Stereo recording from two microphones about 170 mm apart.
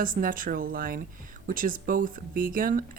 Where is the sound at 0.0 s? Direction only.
55° right (ahead or behind).